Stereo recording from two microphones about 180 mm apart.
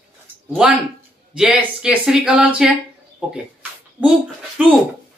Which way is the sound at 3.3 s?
5° right (ahead or behind).